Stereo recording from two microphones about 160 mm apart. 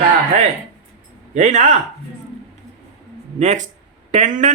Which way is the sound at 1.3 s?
45° right (ahead or behind).